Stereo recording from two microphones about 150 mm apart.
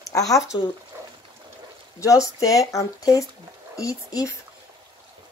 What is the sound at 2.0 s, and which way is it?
Speech, 20° left (ahead or behind).